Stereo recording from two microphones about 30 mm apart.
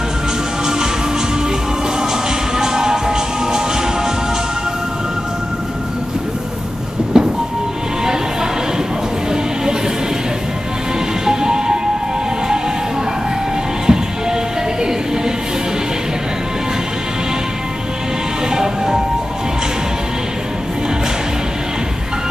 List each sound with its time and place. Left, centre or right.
2.5 s music: centre
7.1 s music: right
11.2 s music: right
13.8 s music: right
18.5 s music: right